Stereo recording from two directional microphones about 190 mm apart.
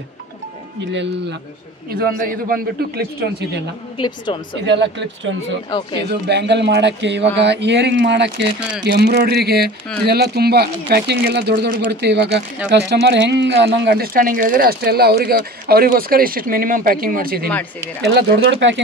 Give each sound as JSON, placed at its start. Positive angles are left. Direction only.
{"t": 1.9, "sound": "speech", "side_deg": -50}
{"t": 4.6, "sound": "speech", "side_deg": -65}
{"t": 18.0, "sound": "speech", "side_deg": -70}